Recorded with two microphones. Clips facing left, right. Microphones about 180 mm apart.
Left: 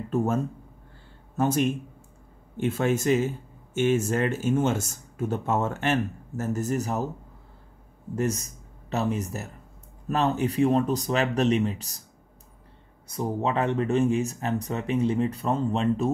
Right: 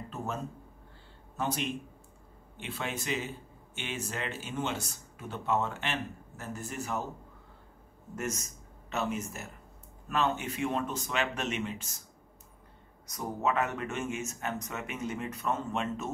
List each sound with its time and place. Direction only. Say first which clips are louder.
0.1 s speech: left 13 dB; 50° left (ahead or behind)
8.2 s speech: left 9 dB; 35° left (ahead or behind)
13.0 s speech: left 5 dB; 30° left (ahead or behind)